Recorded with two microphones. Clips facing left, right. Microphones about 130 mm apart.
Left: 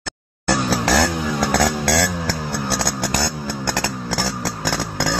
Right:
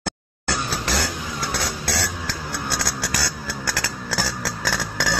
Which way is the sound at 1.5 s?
65° left (ahead or behind).